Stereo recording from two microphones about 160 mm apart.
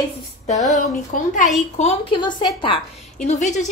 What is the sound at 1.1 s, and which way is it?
Speech, 60° left (ahead or behind).